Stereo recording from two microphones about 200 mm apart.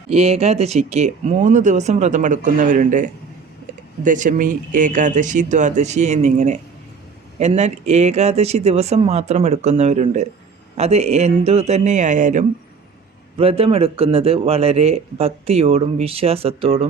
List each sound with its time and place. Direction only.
0.1 s a man's voice: 30° right (ahead or behind)